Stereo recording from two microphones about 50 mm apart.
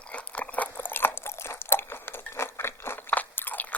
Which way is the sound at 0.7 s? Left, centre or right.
Left.